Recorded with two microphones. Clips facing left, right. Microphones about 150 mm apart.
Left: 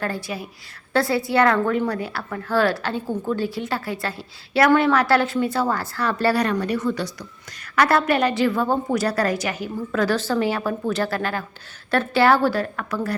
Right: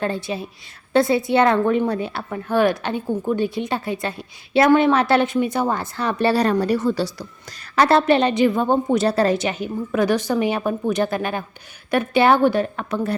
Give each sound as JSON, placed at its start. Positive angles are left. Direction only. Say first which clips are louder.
{"t": 0.0, "sound": "a woman's voice", "louder": "right 3 dB", "side_deg": -25}